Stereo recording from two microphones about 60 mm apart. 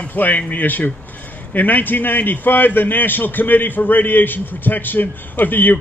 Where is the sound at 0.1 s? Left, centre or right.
Left.